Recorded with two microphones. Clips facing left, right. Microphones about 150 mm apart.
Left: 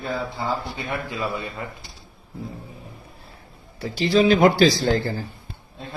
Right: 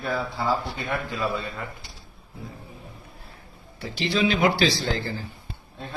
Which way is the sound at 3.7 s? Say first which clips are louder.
Left 7 dB; 40° left (ahead or behind).